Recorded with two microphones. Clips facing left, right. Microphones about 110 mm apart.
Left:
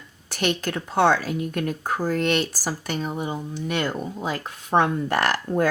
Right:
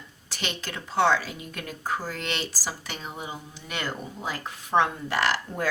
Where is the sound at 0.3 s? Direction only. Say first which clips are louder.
Left 10 dB; 50° left (ahead or behind).